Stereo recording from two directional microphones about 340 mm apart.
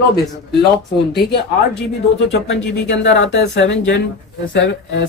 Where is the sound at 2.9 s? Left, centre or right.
Left.